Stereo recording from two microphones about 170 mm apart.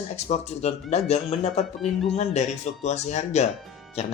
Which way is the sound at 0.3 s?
40° left (ahead or behind).